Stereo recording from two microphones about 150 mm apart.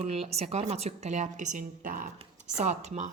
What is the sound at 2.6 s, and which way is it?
Speech, 50° right (ahead or behind).